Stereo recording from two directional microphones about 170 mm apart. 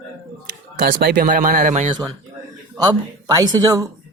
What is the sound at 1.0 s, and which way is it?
Speech, 60° right (ahead or behind).